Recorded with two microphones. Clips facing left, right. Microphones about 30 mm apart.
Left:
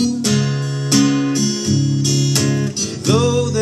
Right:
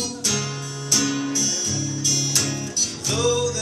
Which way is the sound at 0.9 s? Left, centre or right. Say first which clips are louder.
Left 8 dB; left.